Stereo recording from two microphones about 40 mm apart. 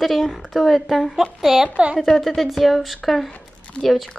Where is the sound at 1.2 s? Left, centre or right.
Centre.